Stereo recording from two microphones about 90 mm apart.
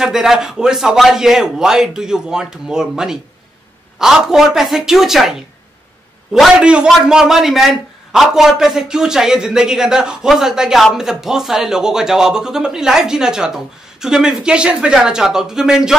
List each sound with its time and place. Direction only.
0.0 s a man's voice: 5° right (ahead or behind)